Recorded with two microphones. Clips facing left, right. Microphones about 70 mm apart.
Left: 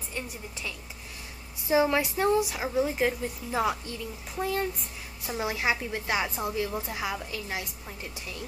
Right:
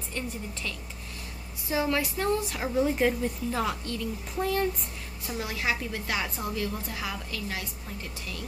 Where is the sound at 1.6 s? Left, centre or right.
Left; by 4.7 s centre.